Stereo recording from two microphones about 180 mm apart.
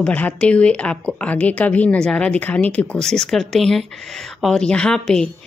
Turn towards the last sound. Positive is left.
turn(degrees=5)  # may be behind; listen again after turning